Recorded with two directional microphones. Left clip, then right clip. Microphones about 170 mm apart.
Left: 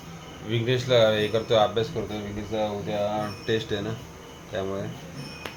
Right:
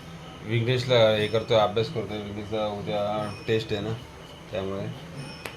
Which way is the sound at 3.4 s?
20° right (ahead or behind).